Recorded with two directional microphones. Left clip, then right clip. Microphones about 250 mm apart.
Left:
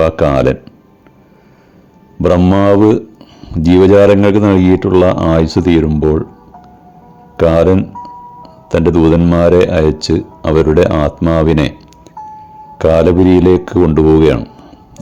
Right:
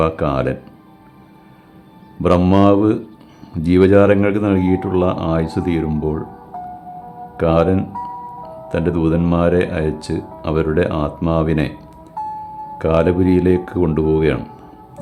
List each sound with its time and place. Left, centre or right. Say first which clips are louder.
0.0 s speech: left 7 dB; left
2.2 s speech: left 4 dB; centre
7.3 s speech: left 6 dB; left
7.9 s music: right 1 dB; right
8.7 s speech: left 8 dB; left
12.8 s speech: left 7 dB; left